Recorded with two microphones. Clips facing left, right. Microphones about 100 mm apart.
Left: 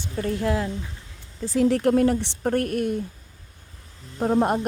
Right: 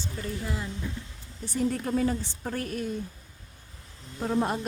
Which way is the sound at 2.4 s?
55° left (ahead or behind).